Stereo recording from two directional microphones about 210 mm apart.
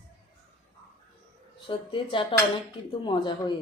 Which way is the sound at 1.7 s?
25° left (ahead or behind).